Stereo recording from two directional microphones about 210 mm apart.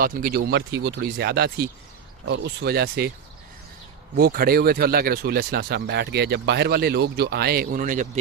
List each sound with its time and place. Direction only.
0.0 s speech: 45° right (ahead or behind)
4.2 s speech: 45° right (ahead or behind)